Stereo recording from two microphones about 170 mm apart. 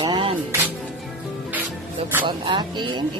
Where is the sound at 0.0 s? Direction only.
30° right (ahead or behind).